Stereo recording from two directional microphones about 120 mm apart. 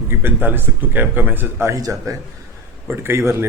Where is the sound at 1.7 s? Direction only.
30° right (ahead or behind).